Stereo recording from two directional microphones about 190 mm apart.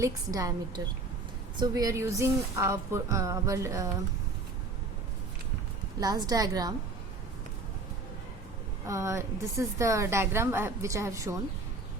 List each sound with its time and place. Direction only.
0.0 s a woman's voice: 15° right (ahead or behind)
6.0 s a woman's voice: 20° right (ahead or behind)
8.9 s a woman's voice: 15° right (ahead or behind)